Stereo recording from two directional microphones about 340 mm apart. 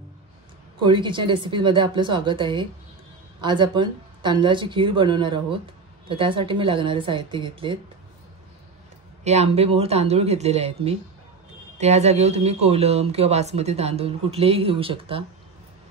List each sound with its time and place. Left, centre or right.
0.8 s speech: centre
9.2 s speech: centre